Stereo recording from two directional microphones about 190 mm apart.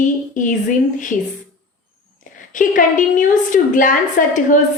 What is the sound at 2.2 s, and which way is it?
A woman's voice, 45° left (ahead or behind).